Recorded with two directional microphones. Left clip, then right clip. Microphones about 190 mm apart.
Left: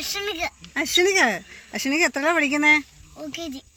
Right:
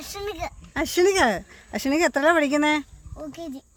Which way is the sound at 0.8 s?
50° right (ahead or behind).